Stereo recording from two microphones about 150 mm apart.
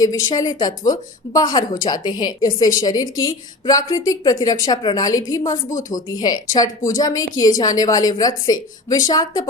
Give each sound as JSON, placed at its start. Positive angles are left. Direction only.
{"t": 0.0, "sound": "speech", "side_deg": 25}